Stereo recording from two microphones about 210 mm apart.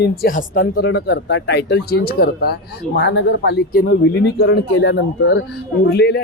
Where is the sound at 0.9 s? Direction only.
55° left (ahead or behind).